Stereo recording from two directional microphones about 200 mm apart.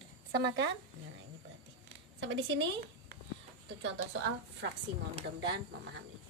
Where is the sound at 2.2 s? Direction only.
65° right (ahead or behind).